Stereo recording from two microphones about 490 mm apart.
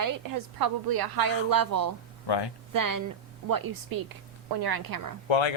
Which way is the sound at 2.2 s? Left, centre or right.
Left.